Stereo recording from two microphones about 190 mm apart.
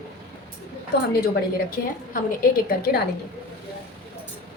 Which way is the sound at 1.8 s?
50° left (ahead or behind).